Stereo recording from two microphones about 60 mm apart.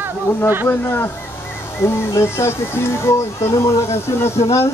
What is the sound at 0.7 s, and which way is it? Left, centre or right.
Speech, left.